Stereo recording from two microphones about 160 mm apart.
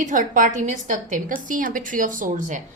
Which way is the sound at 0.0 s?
55° right (ahead or behind).